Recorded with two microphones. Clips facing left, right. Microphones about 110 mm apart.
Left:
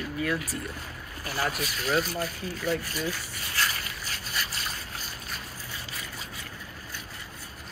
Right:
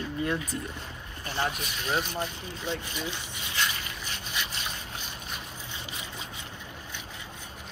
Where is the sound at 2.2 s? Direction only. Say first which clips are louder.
Left 3 dB; 25° right (ahead or behind).